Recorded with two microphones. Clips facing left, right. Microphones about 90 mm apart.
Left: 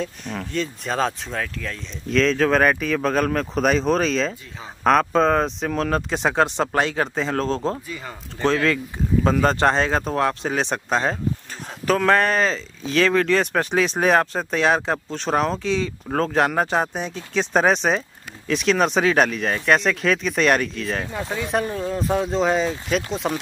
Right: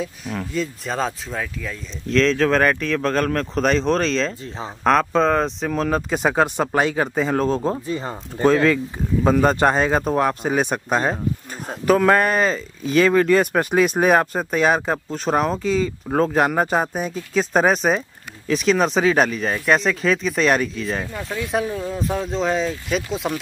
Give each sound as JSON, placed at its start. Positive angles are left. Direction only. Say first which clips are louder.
{"t": 0.0, "sound": "speech", "louder": "right 1 dB", "side_deg": -5}
{"t": 7.8, "sound": "speech", "louder": "right 8 dB", "side_deg": -35}
{"t": 9.2, "sound": "speech", "louder": "right 2 dB", "side_deg": -5}